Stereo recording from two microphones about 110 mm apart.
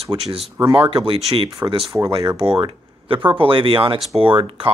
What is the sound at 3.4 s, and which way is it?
Speech, 50° right (ahead or behind).